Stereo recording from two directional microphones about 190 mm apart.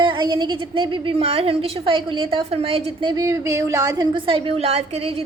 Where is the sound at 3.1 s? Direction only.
15° right (ahead or behind).